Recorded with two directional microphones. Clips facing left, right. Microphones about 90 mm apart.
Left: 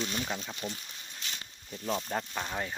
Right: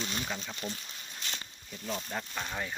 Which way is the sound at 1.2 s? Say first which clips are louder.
Right 1 dB; 5° left (ahead or behind).